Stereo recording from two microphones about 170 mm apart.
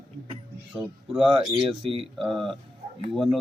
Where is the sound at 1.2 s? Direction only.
30° right (ahead or behind).